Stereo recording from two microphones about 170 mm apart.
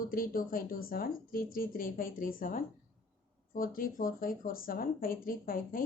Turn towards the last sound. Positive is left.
turn(degrees=55)  # may be behind; listen again after turning